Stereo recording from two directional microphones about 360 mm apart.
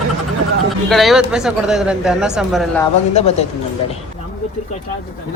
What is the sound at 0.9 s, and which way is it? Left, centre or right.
Speech, centre.